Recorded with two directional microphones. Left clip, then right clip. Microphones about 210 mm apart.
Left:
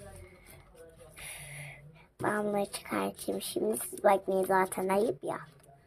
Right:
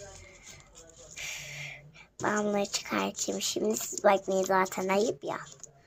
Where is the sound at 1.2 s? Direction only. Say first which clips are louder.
Right 7 dB; centre (ahead or behind).